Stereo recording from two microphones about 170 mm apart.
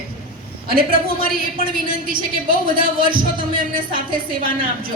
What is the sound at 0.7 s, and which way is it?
A woman's voice, 60° right (ahead or behind).